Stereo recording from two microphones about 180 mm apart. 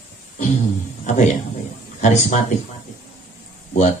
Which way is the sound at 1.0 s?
40° left (ahead or behind).